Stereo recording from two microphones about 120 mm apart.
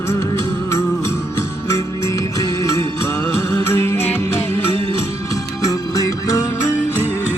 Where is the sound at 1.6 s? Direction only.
25° left (ahead or behind).